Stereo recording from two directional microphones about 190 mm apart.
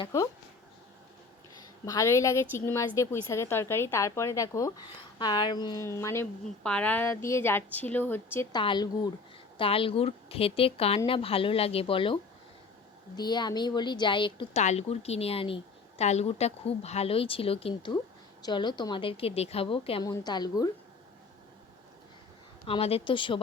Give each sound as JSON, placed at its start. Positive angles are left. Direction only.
{"t": 0.0, "sound": "a woman's voice", "side_deg": 20}
{"t": 1.8, "sound": "a woman's voice", "side_deg": 15}
{"t": 6.4, "sound": "a woman's voice", "side_deg": 5}
{"t": 8.5, "sound": "a woman's voice", "side_deg": 25}
{"t": 22.6, "sound": "a woman's voice", "side_deg": 30}